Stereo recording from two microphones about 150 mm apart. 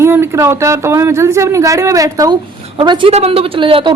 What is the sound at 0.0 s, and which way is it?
A man's voice, 15° right (ahead or behind).